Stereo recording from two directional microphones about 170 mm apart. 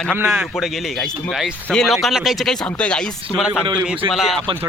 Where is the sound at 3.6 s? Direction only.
25° right (ahead or behind).